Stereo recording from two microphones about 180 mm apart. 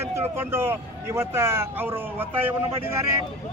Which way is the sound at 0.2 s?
10° right (ahead or behind).